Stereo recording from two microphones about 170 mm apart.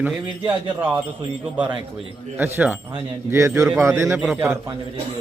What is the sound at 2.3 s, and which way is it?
A man's voice, 10° right (ahead or behind).